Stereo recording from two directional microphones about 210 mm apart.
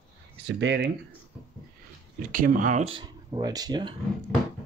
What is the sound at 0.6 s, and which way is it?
Speech, 55° right (ahead or behind).